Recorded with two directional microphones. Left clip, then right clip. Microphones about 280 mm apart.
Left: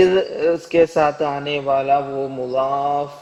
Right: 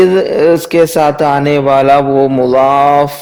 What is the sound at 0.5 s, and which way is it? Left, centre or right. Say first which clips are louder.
Speech: right 7 dB; right.